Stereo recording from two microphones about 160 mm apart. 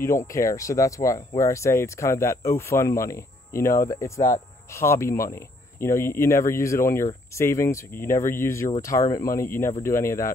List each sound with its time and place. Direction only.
0.0 s speech: 20° left (ahead or behind)